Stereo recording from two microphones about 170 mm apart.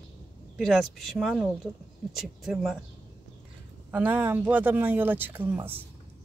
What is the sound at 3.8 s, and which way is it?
Speech, 10° right (ahead or behind).